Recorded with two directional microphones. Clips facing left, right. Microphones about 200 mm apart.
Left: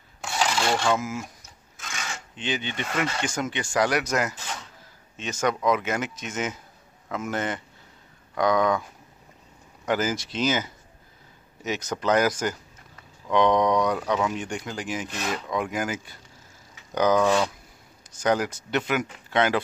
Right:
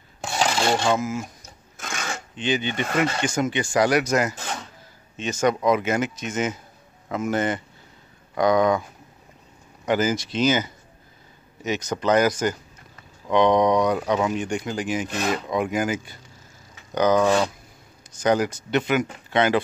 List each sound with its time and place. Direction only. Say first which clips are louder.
0.2 s filing: right 3 dB; 25° right (ahead or behind)
1.8 s filing: right 5 dB; 50° right (ahead or behind)
2.3 s speech: right 6 dB; centre (ahead or behind)
2.7 s speech: right 5 dB; 45° right (ahead or behind)
3.0 s speech: right 5 dB; centre (ahead or behind)
9.8 s speech: right 4 dB; centre (ahead or behind)
14.0 s speech: right 3 dB; 15° right (ahead or behind)
14.3 s speech: right 5 dB; centre (ahead or behind)
17.2 s speech: right 2 dB; 10° right (ahead or behind)